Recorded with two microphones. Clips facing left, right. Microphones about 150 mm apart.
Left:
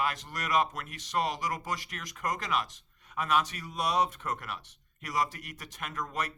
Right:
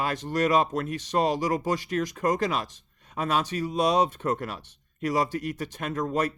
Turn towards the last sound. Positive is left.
turn(degrees=-30)  # may be behind; listen again after turning